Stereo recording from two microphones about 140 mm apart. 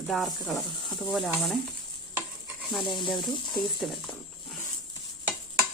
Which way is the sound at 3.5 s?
Centre (ahead or behind).